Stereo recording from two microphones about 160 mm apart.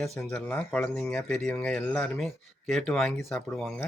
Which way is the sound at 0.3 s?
10° left (ahead or behind).